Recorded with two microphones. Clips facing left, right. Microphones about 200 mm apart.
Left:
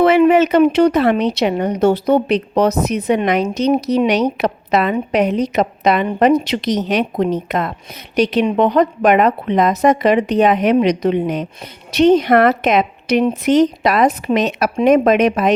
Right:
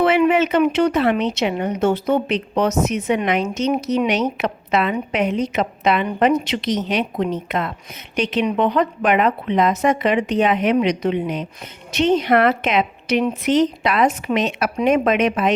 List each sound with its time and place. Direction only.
0.0 s speech: 40° left (ahead or behind)